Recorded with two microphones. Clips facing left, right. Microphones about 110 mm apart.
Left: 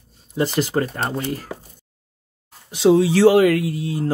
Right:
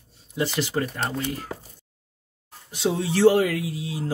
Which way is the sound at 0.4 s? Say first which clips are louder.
Left 5 dB; 45° left (ahead or behind).